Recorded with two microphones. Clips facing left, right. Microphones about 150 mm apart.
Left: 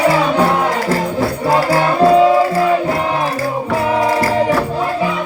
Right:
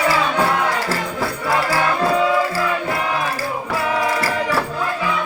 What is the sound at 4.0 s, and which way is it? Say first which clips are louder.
Music: left 8 dB; 35° left (ahead or behind).